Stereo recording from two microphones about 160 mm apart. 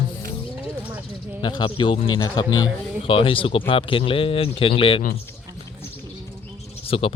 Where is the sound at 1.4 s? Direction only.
30° left (ahead or behind).